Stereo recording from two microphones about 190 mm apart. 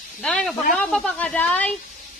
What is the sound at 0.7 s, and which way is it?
A woman's voice, 5° left (ahead or behind).